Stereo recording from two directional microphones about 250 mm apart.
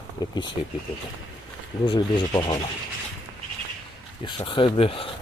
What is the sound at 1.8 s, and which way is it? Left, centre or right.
Speech, centre.